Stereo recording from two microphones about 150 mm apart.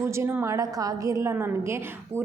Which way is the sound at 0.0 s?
20° right (ahead or behind).